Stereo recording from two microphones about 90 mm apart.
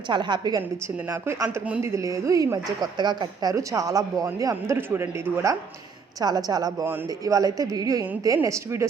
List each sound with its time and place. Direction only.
0.1 s a woman's voice: 60° right (ahead or behind)
1.5 s speech: 15° right (ahead or behind)
1.8 s a woman's voice: 35° right (ahead or behind); by 3.5 s 55° right (ahead or behind)
3.5 s a woman's voice: 35° right (ahead or behind)
4.9 s speech: 25° right (ahead or behind)
6.1 s a woman's voice: 45° right (ahead or behind)